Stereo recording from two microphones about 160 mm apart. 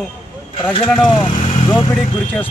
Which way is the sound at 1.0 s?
30° left (ahead or behind).